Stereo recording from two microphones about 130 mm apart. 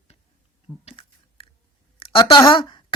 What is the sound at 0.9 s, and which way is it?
Chewing, 40° left (ahead or behind).